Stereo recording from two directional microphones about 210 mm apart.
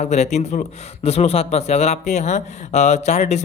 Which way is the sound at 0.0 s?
30° left (ahead or behind).